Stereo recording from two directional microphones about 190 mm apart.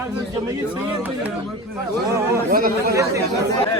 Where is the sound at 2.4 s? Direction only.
50° right (ahead or behind).